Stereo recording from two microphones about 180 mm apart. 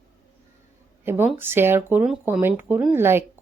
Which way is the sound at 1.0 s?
10° right (ahead or behind).